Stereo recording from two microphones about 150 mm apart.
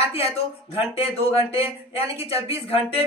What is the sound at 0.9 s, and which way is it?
A woman's voice, 40° left (ahead or behind).